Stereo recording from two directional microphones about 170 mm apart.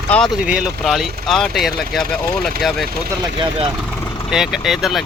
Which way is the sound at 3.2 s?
30° right (ahead or behind).